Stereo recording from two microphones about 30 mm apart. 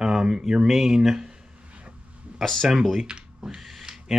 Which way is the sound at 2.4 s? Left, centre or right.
Centre.